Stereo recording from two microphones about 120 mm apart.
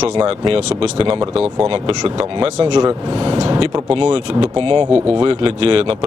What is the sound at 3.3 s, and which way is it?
Speech, 45° right (ahead or behind).